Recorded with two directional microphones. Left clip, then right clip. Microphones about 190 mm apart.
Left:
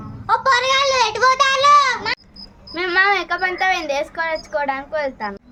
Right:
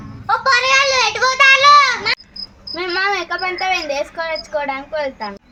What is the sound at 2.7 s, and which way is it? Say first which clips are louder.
A woman's voice: left 2 dB; 15° left (ahead or behind).